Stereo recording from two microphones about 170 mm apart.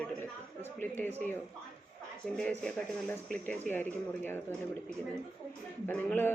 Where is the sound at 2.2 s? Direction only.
5° left (ahead or behind).